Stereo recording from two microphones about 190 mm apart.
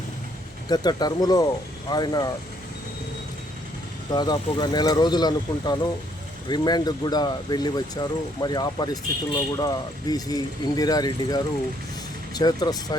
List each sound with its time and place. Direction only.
0.7 s speech: 20° left (ahead or behind)
4.1 s speech: 20° left (ahead or behind)